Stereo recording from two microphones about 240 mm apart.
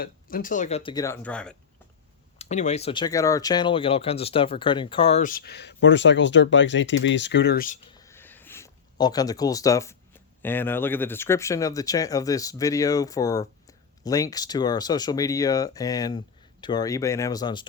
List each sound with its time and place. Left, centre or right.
0.0 s speech: left; by 1.5 s centre
2.4 s speech: left
7.9 s a sound: centre
10.4 s speech: centre